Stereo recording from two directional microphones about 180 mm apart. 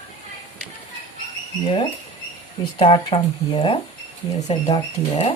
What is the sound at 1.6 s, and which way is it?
Speech, 30° left (ahead or behind).